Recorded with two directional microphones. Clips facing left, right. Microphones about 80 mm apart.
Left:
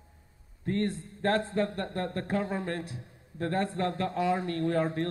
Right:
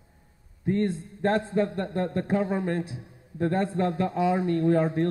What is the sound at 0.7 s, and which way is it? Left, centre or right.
Speech, right.